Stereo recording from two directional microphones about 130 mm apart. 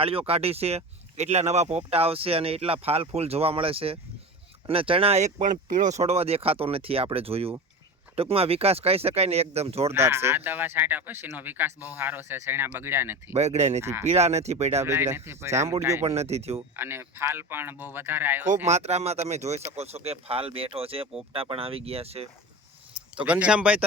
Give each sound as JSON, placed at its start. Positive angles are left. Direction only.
{"t": 0.0, "sound": "speech", "side_deg": -45}
{"t": 5.4, "sound": "speech", "side_deg": -90}
{"t": 9.9, "sound": "speech", "side_deg": -20}
{"t": 13.3, "sound": "speech", "side_deg": -55}
{"t": 14.8, "sound": "speech", "side_deg": -20}
{"t": 16.0, "sound": "speech", "side_deg": -55}
{"t": 16.6, "sound": "speech", "side_deg": -20}
{"t": 18.4, "sound": "speech", "side_deg": -65}
{"t": 23.2, "sound": "speech", "side_deg": -10}